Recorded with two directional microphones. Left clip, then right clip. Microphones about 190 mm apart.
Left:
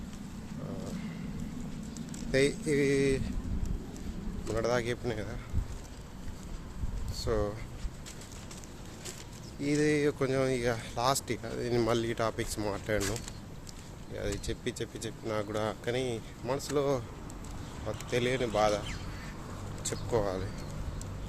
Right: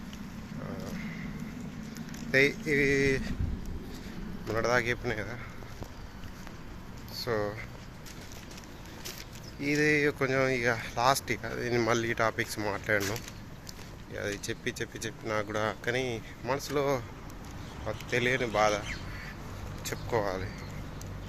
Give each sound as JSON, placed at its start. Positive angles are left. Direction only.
{"t": 2.3, "sound": "speech", "side_deg": 15}
{"t": 4.4, "sound": "speech", "side_deg": 5}
{"t": 7.1, "sound": "a sound", "side_deg": 15}
{"t": 9.6, "sound": "speech", "side_deg": 20}
{"t": 14.2, "sound": "speech", "side_deg": 10}
{"t": 19.8, "sound": "speech", "side_deg": 15}